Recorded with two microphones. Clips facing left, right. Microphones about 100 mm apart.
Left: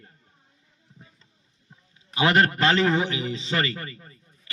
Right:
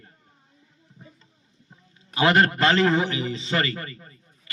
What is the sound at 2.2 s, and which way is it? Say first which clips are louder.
A man's voice: right 1 dB; centre (ahead or behind).